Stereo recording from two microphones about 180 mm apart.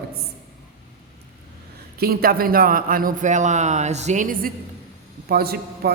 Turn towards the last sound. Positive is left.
turn(degrees=-60)  # may be behind; listen again after turning